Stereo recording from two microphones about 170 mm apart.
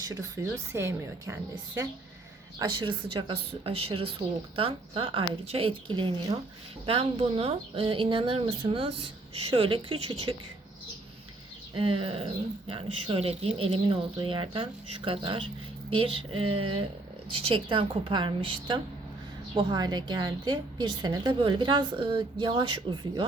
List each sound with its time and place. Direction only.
0.0 s a woman's voice: 20° right (ahead or behind)
2.6 s a woman's voice: 30° right (ahead or behind)
11.8 s a woman's voice: 30° right (ahead or behind)